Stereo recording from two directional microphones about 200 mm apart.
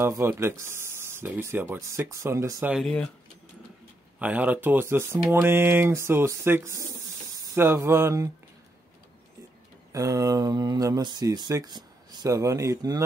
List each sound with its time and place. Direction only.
0.0 s speech: 10° right (ahead or behind)
2.7 s speech: centre (ahead or behind)
4.2 s speech: 5° right (ahead or behind)
9.9 s speech: 15° right (ahead or behind)